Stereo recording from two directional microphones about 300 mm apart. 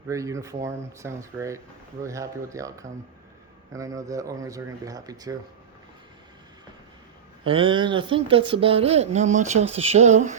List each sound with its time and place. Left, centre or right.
0.1 s speech: centre
7.4 s speech: centre